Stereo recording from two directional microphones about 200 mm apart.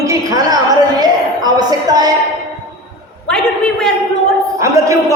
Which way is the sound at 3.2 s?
5° left (ahead or behind).